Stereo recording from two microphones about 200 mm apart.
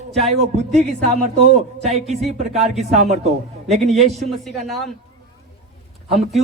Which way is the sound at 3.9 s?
Centre (ahead or behind).